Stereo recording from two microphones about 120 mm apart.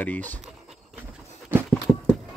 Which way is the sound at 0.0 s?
15° left (ahead or behind).